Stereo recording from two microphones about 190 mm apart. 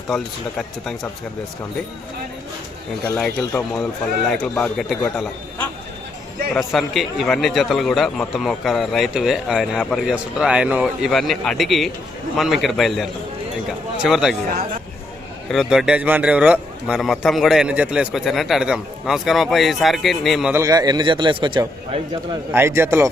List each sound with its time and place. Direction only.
0.1 s speech: centre (ahead or behind)
3.2 s speech: 5° left (ahead or behind)
6.7 s speech: centre (ahead or behind)
15.4 s speech: centre (ahead or behind)
20.5 s a man's voice: 15° right (ahead or behind)